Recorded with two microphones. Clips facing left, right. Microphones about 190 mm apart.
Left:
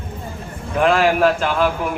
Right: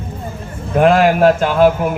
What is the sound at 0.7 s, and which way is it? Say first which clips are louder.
Speech: right 4 dB; 40° right (ahead or behind).